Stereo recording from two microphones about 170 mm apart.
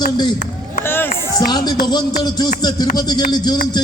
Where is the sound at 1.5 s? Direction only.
25° left (ahead or behind).